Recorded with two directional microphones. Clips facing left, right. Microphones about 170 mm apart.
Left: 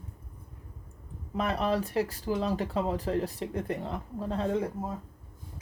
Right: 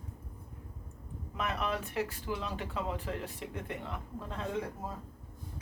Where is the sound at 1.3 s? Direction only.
35° left (ahead or behind).